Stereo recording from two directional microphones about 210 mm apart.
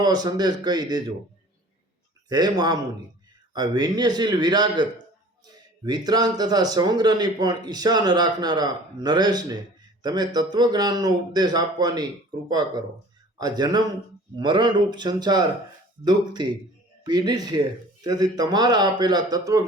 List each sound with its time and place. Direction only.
0.0 s speech: 20° right (ahead or behind)
2.3 s speech: 20° right (ahead or behind)